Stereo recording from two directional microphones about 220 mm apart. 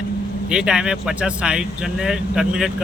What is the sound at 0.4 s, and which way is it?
Speech, 5° right (ahead or behind).